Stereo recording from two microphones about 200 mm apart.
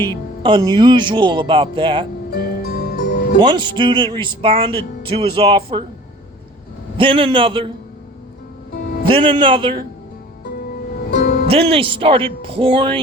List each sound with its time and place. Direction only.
0.1 s speech: 25° right (ahead or behind)
2.3 s music: 50° left (ahead or behind)
3.4 s speech: 25° right (ahead or behind)
7.0 s speech: 25° right (ahead or behind)
9.0 s speech: 25° right (ahead or behind)
11.1 s music: 50° left (ahead or behind)
11.4 s speech: 30° right (ahead or behind)